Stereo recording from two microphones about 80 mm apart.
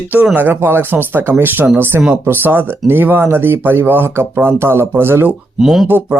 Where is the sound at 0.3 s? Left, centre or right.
Right.